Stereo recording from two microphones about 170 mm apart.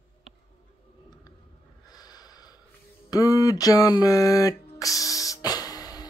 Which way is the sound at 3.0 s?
20° left (ahead or behind).